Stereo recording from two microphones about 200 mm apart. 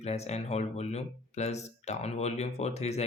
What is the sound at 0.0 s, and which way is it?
Speech, 35° left (ahead or behind).